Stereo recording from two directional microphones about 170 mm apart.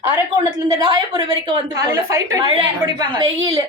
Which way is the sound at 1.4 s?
25° right (ahead or behind).